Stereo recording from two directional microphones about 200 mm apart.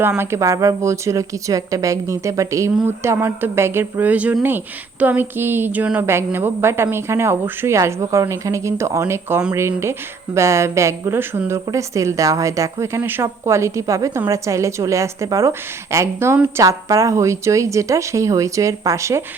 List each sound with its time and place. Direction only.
0.0 s a woman's voice: 10° right (ahead or behind)